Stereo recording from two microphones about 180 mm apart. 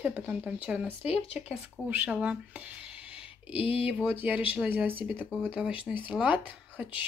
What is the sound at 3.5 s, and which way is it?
Speech, 30° left (ahead or behind).